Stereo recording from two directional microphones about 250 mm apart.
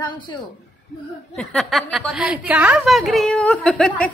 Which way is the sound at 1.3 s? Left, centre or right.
Centre.